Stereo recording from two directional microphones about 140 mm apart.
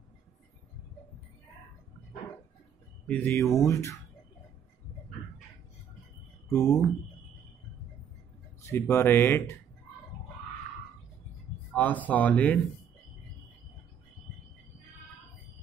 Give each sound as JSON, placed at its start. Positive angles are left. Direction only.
{"t": 3.1, "sound": "speech", "side_deg": 10}
{"t": 6.5, "sound": "speech", "side_deg": 20}
{"t": 8.6, "sound": "speech", "side_deg": 15}
{"t": 11.7, "sound": "speech", "side_deg": 10}